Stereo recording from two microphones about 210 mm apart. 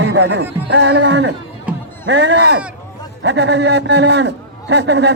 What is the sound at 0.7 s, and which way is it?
Speech, 55° right (ahead or behind).